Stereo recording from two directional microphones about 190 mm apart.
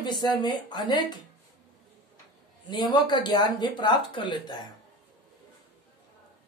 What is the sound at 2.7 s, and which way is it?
A woman's voice, 25° left (ahead or behind).